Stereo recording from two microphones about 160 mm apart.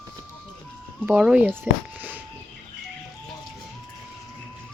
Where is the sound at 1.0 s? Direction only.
5° right (ahead or behind).